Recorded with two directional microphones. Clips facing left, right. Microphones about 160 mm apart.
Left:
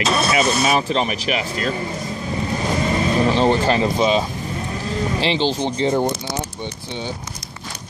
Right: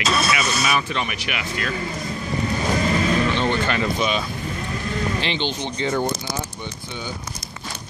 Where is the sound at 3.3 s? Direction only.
35° left (ahead or behind).